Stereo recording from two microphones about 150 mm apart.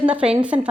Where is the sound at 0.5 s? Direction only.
40° right (ahead or behind).